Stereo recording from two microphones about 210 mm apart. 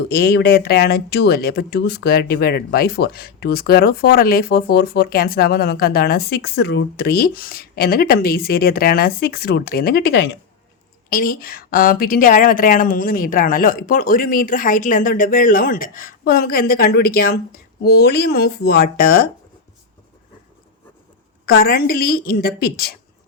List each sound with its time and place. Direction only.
0.1 s a woman's voice: 50° left (ahead or behind)
21.4 s speech: 45° left (ahead or behind)